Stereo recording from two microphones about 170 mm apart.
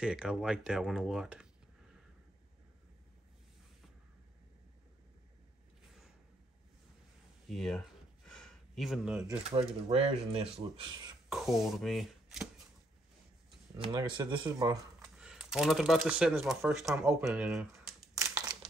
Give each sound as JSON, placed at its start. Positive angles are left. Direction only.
{"t": 0.0, "sound": "speech", "side_deg": -5}
{"t": 7.4, "sound": "speech", "side_deg": 0}
{"t": 8.3, "sound": "a sound", "side_deg": 5}
{"t": 9.4, "sound": "speech", "side_deg": -35}
{"t": 10.8, "sound": "speech", "side_deg": -25}
{"t": 11.2, "sound": "speech", "side_deg": 0}
{"t": 13.7, "sound": "speech", "side_deg": -30}
{"t": 15.1, "sound": "speech", "side_deg": -5}
{"t": 18.2, "sound": "crumpling", "side_deg": -20}